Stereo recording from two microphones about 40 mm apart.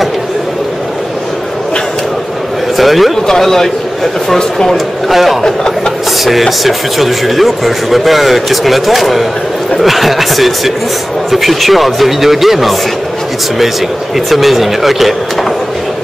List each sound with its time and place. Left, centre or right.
2.8 s a man's voice: centre
4.7 s speech: centre
5.4 s speech: centre
6.2 s speech: centre
14.1 s speech: centre